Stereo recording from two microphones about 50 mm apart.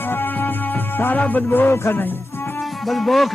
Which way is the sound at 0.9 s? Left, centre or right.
Left.